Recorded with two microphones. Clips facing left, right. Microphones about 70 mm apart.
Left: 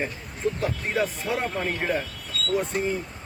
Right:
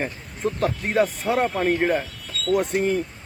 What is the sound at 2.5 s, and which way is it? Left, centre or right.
Speech, right.